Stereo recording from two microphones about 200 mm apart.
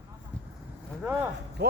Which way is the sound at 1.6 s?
55° right (ahead or behind).